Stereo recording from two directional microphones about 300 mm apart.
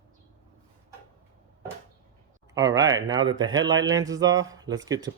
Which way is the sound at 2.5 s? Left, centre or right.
Centre.